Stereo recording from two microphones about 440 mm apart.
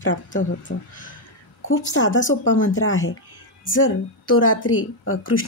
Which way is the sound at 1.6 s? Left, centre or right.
Left.